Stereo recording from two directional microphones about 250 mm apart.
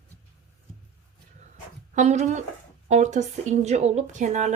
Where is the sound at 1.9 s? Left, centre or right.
Right.